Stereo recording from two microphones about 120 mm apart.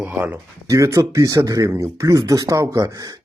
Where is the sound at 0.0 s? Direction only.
15° right (ahead or behind).